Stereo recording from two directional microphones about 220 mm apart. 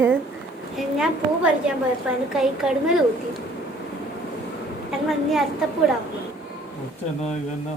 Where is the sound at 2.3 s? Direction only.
Centre (ahead or behind).